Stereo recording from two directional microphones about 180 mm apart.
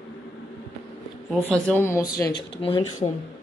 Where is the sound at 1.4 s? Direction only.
10° left (ahead or behind).